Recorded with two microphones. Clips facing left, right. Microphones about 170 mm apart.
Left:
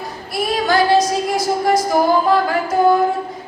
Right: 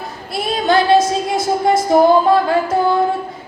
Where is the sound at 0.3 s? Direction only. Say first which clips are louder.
Right 1 dB; 25° right (ahead or behind).